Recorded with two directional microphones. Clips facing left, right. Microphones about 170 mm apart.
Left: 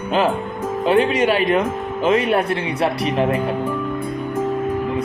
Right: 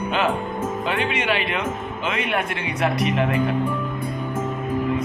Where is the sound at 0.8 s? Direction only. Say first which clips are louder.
Left 10 dB; 40° left (ahead or behind).